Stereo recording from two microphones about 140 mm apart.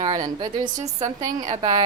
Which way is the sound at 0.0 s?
35° right (ahead or behind).